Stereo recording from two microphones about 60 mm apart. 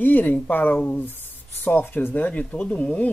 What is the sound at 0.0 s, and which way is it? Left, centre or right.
Speech, left.